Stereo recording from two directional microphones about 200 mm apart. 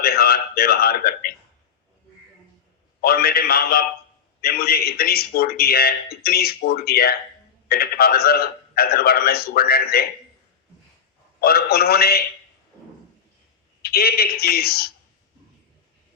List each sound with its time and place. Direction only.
0.0 s a man's voice: 50° left (ahead or behind)
3.0 s a man's voice: 50° left (ahead or behind)
11.3 s a man's voice: 50° left (ahead or behind)
13.8 s a man's voice: 50° left (ahead or behind)